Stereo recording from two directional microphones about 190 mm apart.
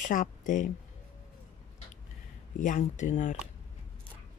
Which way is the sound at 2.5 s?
45° left (ahead or behind).